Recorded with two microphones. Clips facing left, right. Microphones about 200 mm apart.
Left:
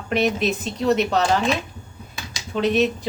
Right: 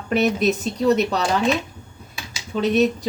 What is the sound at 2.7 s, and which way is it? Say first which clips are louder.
Speech: right 4 dB; 40° right (ahead or behind).